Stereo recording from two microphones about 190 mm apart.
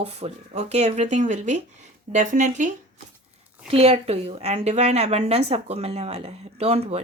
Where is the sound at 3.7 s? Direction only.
30° right (ahead or behind).